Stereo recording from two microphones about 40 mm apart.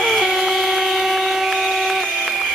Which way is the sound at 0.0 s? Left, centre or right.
Centre.